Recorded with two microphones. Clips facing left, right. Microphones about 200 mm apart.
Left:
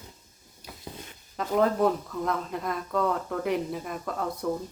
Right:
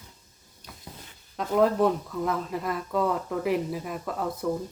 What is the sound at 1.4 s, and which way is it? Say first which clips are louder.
Speech: right 2 dB; centre (ahead or behind).